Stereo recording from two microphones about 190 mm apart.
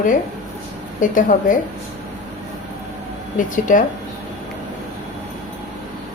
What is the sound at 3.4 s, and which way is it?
Speech, 45° left (ahead or behind).